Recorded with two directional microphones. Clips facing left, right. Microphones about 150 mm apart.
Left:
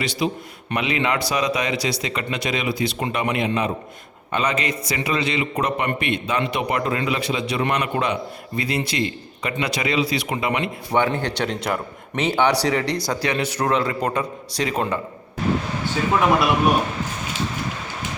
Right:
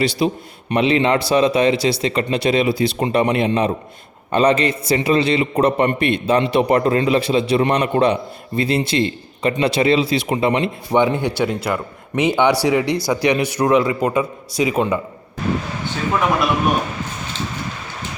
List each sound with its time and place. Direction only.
0.0 s a man's voice: 30° right (ahead or behind)
10.9 s a man's voice: 15° right (ahead or behind)